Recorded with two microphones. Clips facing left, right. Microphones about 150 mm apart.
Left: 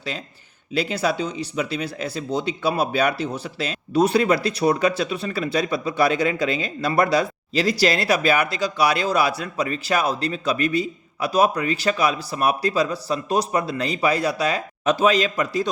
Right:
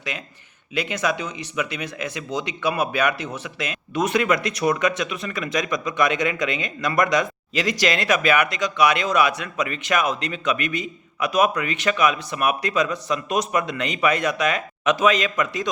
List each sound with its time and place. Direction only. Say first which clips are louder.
0.7 s speech: left 2 dB; 35° left (ahead or behind)